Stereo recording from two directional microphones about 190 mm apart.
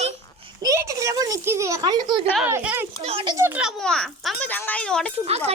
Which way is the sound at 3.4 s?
10° right (ahead or behind).